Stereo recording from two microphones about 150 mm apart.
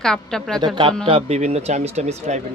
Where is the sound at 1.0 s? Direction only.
45° right (ahead or behind).